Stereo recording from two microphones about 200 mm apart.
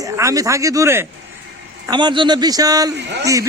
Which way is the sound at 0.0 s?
15° right (ahead or behind).